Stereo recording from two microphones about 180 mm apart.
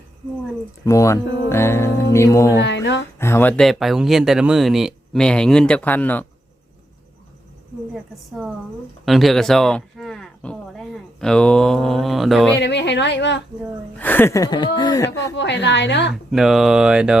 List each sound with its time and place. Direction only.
0.9 s speech: 15° left (ahead or behind)
2.6 s a woman's voice: 75° left (ahead or behind)
3.2 s speech: 15° left (ahead or behind)
9.0 s speech: centre (ahead or behind)
12.5 s a woman's voice: 75° left (ahead or behind)
14.0 s speech: 10° left (ahead or behind)
15.4 s a woman's voice: 75° left (ahead or behind)
16.3 s speech: centre (ahead or behind)